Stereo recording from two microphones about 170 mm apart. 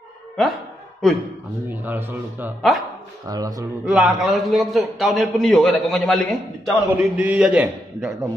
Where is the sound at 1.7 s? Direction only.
10° right (ahead or behind).